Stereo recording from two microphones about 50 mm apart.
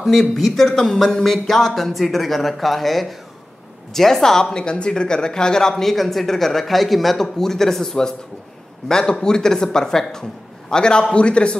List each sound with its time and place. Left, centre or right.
0.0 s speech: centre